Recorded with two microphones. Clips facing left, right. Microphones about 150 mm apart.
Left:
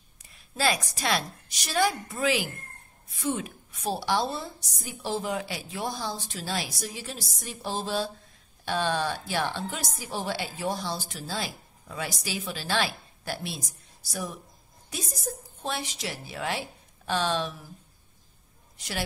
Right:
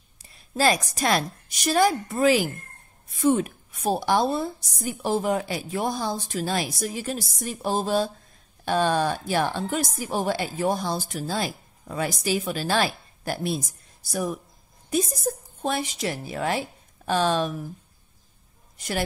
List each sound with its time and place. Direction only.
0.2 s a woman's voice: 35° right (ahead or behind)
18.8 s a woman's voice: 50° right (ahead or behind)